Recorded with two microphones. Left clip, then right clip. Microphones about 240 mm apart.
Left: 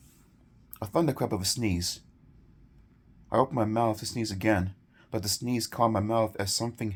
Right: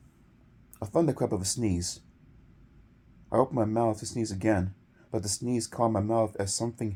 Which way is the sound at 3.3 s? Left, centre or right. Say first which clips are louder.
Even; left.